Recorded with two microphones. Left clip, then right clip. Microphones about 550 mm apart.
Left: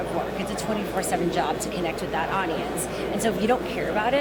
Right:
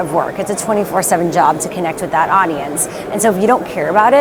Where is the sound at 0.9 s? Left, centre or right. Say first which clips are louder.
Right 11 dB; right.